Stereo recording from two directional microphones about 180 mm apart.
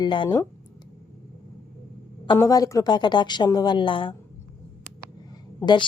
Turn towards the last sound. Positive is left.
turn(degrees=25)  # may be behind; listen again after turning